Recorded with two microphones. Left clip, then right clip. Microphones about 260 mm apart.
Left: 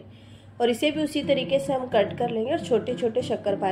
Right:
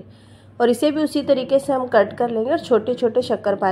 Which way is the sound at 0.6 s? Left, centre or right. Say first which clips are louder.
Right 6 dB; right.